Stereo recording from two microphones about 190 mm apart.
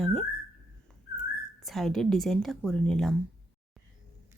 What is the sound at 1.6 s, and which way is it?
Speech, centre (ahead or behind).